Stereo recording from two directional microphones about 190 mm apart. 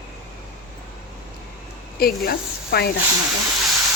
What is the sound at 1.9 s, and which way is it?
Speech, 50° left (ahead or behind).